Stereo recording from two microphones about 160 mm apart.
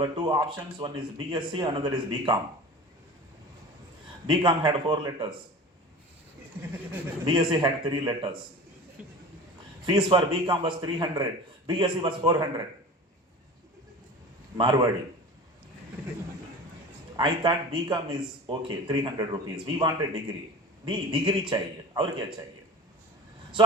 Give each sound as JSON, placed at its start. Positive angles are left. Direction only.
{"t": 0.0, "sound": "speech", "side_deg": -25}
{"t": 4.3, "sound": "speech", "side_deg": -30}
{"t": 7.3, "sound": "speech", "side_deg": -30}
{"t": 9.8, "sound": "a man's voice", "side_deg": -30}
{"t": 14.6, "sound": "speech", "side_deg": -25}
{"t": 17.2, "sound": "a man's voice", "side_deg": -30}